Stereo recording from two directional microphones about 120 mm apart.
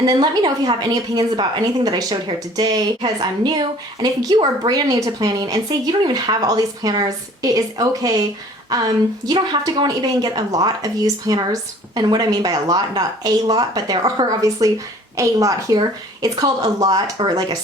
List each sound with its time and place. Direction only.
0.0 s a woman's voice: 35° right (ahead or behind)